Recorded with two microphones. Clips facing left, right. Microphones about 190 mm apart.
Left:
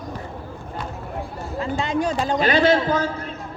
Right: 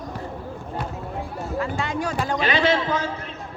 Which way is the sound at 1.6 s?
20° left (ahead or behind).